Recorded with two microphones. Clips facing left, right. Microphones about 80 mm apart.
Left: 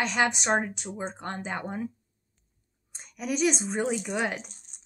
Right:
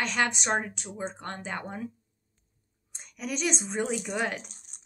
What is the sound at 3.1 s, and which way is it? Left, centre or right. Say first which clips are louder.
Speech: left 4 dB; centre.